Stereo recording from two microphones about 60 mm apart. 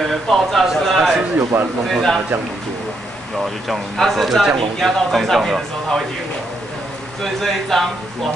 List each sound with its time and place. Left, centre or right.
0.3 s speech: centre
1.5 s speech: right
1.9 s speech: centre
3.6 s speech: centre
7.3 s speech: centre